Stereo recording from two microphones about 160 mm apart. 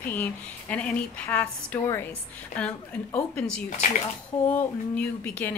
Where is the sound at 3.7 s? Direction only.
50° left (ahead or behind).